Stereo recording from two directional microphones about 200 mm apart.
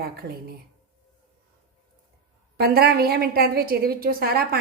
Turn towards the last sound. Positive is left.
turn(degrees=-50)  # may be behind; listen again after turning